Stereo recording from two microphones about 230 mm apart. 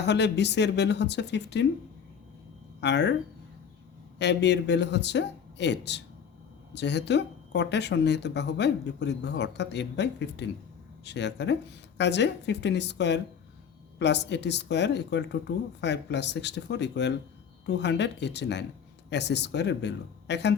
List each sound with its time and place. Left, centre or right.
0.0 s speech: left
2.8 s speech: left
4.2 s speech: left